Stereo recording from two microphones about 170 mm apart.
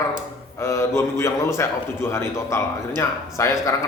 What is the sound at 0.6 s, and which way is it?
A man's voice, 15° left (ahead or behind).